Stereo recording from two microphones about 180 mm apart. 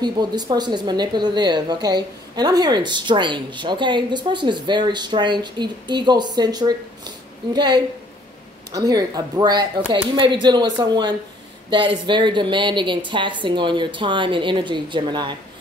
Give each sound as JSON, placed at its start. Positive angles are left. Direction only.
{"t": 0.0, "sound": "speech", "side_deg": -25}